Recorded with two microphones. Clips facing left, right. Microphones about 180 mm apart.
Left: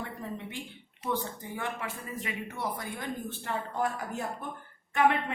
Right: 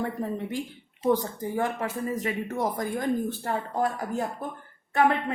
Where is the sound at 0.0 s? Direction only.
40° right (ahead or behind).